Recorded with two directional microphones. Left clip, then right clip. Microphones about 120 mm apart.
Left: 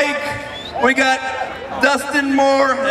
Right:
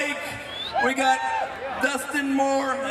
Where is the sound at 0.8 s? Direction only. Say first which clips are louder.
Left 8 dB; 30° left (ahead or behind).